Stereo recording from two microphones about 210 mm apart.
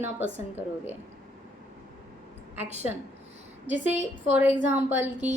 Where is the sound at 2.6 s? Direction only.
30° right (ahead or behind).